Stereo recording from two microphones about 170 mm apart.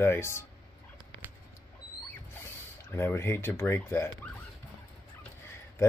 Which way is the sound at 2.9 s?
15° left (ahead or behind).